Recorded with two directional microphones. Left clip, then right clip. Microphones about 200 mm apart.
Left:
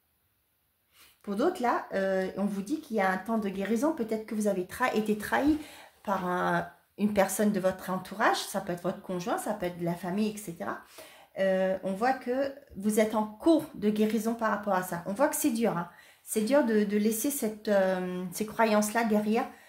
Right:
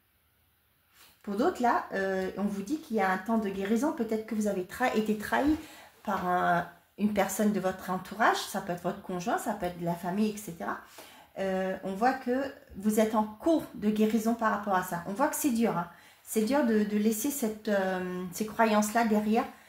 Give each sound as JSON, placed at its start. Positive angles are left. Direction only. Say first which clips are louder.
{"t": 1.3, "sound": "speech", "louder": "right 1 dB", "side_deg": 40}